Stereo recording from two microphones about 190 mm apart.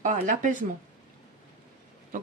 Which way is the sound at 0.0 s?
45° right (ahead or behind).